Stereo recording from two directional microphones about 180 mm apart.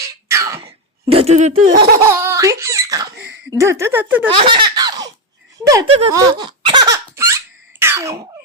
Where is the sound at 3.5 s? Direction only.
15° right (ahead or behind).